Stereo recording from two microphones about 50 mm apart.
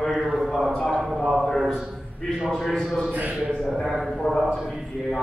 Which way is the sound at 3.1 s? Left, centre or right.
Right.